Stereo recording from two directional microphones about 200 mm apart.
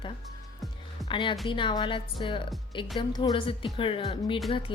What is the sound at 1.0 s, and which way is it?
A woman's voice, 25° left (ahead or behind).